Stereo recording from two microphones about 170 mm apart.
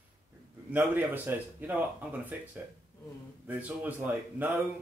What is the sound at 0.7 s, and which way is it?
Speech, 10° right (ahead or behind).